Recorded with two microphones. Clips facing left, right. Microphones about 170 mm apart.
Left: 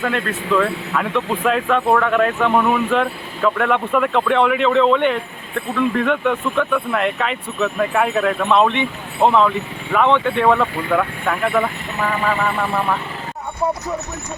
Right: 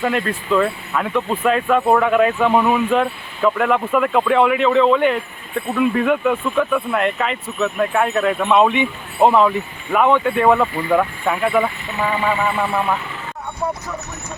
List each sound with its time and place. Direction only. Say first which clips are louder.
0.0 s speech: right 1 dB; 10° right (ahead or behind)